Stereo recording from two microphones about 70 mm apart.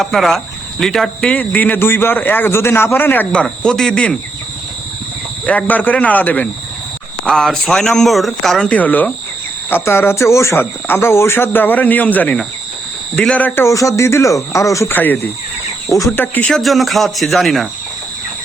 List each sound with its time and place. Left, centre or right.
0.0 s speech: centre; by 3.2 s left
3.3 s speech: centre
5.5 s speech: left
7.3 s speech: centre
8.7 s speech: left
9.6 s speech: left; by 13.5 s centre
13.7 s speech: left
14.8 s speech: left
15.9 s speech: left
16.1 s speech: left
16.5 s speech: centre